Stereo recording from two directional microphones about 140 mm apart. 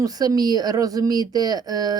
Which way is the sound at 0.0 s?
25° right (ahead or behind).